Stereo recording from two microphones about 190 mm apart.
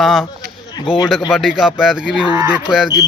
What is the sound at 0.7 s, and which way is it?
Speech, 25° left (ahead or behind).